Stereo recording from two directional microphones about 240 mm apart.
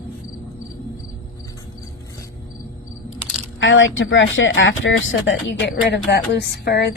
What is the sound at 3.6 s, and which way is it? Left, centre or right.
A woman's voice, left.